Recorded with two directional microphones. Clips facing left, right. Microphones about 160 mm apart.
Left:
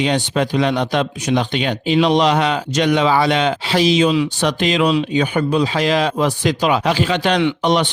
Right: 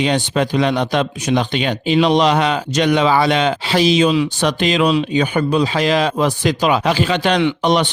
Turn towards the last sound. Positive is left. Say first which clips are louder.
# right 1 dB
turn(degrees=-50)  # may be behind; listen again after turning